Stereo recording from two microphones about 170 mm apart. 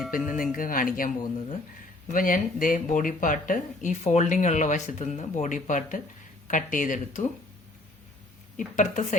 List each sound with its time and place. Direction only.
0.1 s speech: 55° left (ahead or behind)
8.5 s speech: 45° left (ahead or behind)